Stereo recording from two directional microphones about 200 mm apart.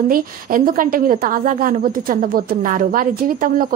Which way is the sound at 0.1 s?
45° right (ahead or behind).